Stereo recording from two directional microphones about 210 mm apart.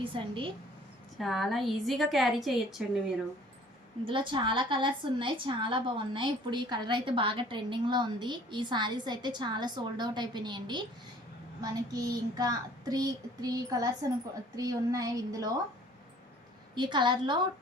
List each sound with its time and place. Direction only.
0.0 s a woman's voice: 25° right (ahead or behind)
1.2 s a woman's voice: centre (ahead or behind)
4.0 s a woman's voice: 25° right (ahead or behind)
16.7 s a woman's voice: 20° right (ahead or behind)